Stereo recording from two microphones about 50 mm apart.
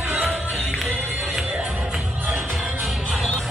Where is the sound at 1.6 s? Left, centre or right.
Centre.